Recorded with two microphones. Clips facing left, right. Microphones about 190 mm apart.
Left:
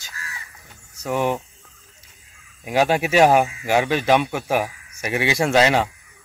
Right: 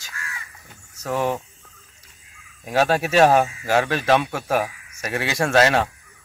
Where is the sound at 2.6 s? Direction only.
15° left (ahead or behind).